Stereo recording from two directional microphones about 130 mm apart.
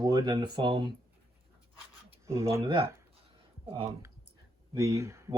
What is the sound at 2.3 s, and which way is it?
Speech, 20° right (ahead or behind).